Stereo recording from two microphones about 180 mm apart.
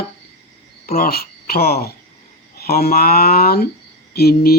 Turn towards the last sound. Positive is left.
turn(degrees=60)  # may be behind; listen again after turning